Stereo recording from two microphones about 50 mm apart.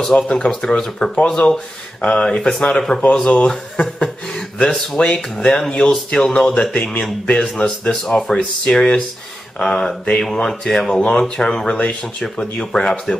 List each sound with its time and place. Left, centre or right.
0.1 s speech: left
0.5 s speech: centre
6.7 s speech: left